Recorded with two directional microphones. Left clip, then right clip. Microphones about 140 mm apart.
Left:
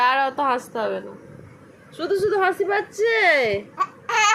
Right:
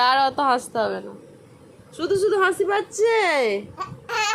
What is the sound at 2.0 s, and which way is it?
A woman's voice, 45° right (ahead or behind).